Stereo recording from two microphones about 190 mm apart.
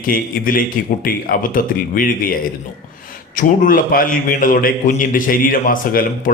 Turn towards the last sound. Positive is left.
turn(degrees=45)  # may be behind; listen again after turning